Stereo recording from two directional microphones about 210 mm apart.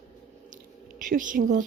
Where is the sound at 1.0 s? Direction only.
40° right (ahead or behind).